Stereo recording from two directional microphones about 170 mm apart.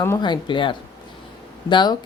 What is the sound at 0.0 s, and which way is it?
A woman's voice, 20° left (ahead or behind).